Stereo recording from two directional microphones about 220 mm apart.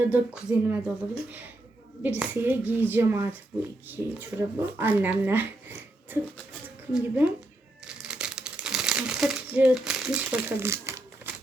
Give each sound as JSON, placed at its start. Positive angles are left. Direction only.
{"t": 0.0, "sound": "speech", "side_deg": -10}
{"t": 7.9, "sound": "crumpling", "side_deg": -5}